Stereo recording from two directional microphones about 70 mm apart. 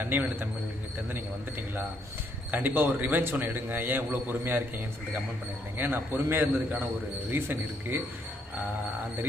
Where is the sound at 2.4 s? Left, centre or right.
Right.